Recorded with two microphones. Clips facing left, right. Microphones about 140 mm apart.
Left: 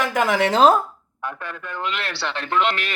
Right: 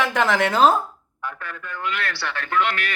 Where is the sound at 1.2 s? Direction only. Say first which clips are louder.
Left 2 dB; 20° left (ahead or behind).